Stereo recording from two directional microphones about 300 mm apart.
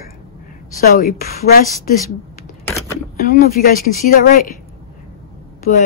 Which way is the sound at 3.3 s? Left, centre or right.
Left.